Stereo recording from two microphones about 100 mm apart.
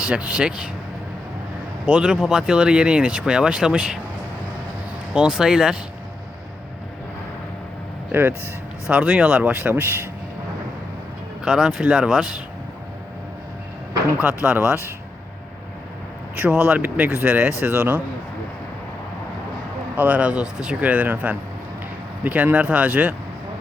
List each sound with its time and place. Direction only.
0.0 s speech: 10° right (ahead or behind)
1.9 s speech: 10° right (ahead or behind)
5.1 s speech: 5° right (ahead or behind)
8.1 s speech: 20° right (ahead or behind)
11.4 s speech: 5° right (ahead or behind)
14.4 s speech: 10° right (ahead or behind)
16.3 s speech: 15° right (ahead or behind)
20.0 s speech: 15° right (ahead or behind)